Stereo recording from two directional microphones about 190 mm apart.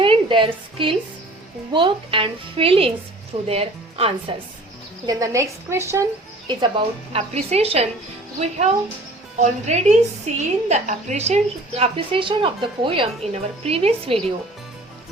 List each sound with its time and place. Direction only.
0.0 s a sound: 25° right (ahead or behind)
1.7 s a woman's voice: 25° right (ahead or behind)
5.0 s speech: 15° right (ahead or behind)
6.5 s a woman's voice: 25° right (ahead or behind)